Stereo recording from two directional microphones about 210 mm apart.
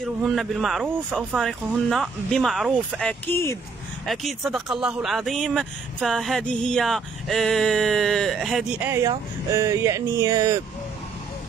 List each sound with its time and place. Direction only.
0.0 s speech: centre (ahead or behind)
4.0 s speech: centre (ahead or behind); by 10.6 s 15° right (ahead or behind)